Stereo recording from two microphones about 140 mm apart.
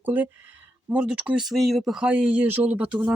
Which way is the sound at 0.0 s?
10° right (ahead or behind).